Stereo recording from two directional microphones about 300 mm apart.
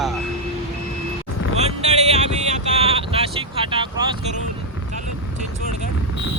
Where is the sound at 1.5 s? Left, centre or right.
Right.